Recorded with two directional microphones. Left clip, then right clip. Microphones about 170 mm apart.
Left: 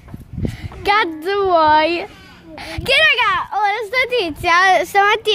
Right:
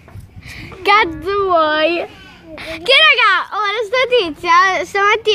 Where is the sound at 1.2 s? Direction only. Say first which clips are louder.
Even; 35° left (ahead or behind).